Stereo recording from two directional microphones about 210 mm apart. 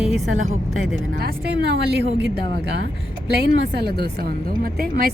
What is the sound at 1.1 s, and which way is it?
Speech, 45° right (ahead or behind).